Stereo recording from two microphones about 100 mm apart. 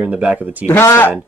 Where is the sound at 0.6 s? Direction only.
25° left (ahead or behind).